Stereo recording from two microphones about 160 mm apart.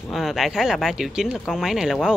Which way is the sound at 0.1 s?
Centre (ahead or behind).